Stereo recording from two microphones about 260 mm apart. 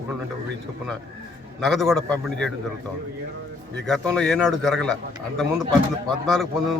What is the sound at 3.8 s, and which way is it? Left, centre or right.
A man's voice, centre.